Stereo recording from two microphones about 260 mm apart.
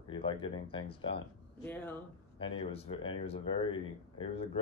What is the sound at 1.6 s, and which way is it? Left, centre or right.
Speech, centre.